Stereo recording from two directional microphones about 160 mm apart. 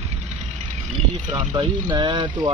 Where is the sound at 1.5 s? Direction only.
25° right (ahead or behind).